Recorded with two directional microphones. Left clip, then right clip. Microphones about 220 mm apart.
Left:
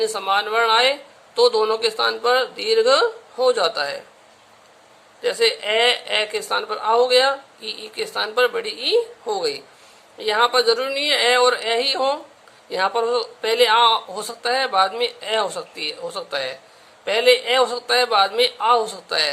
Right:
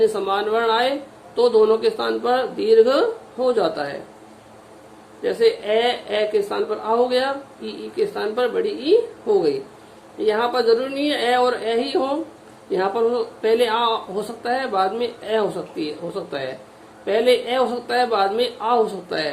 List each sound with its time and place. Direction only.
0.0 s speech: 30° left (ahead or behind)
5.2 s speech: 30° left (ahead or behind)